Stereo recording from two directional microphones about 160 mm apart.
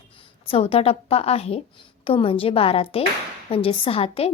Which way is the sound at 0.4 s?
35° left (ahead or behind).